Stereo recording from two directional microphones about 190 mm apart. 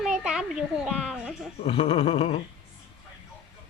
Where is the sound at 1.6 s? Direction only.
25° left (ahead or behind).